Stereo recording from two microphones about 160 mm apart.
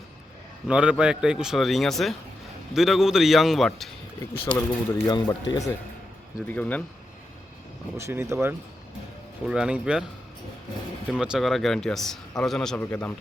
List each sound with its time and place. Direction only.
0.7 s speech: 5° right (ahead or behind)
4.4 s speech: 30° left (ahead or behind)
6.5 s a man's voice: 10° left (ahead or behind)
7.9 s speech: 15° right (ahead or behind)
11.1 s a man's voice: 5° right (ahead or behind)